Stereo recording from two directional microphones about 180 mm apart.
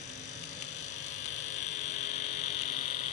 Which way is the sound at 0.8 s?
40° left (ahead or behind).